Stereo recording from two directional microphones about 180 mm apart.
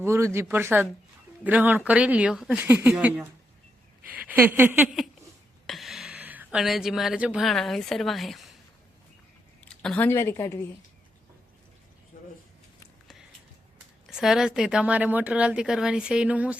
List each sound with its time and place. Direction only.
0.0 s speech: 15° right (ahead or behind)
5.6 s speech: centre (ahead or behind)
9.6 s a woman's voice: 5° left (ahead or behind)
12.1 s a sound: 45° left (ahead or behind)
14.1 s a woman's voice: centre (ahead or behind)